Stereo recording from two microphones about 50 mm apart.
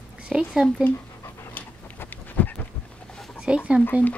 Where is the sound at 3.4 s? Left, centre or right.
Right.